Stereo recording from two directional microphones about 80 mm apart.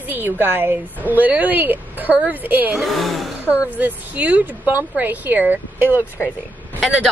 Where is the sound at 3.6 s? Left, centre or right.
Centre.